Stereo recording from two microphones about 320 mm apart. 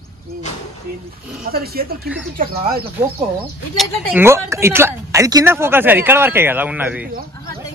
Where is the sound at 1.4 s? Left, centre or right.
Right.